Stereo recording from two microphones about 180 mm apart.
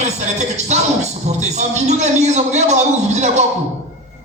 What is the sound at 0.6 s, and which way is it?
A man's voice, 40° right (ahead or behind).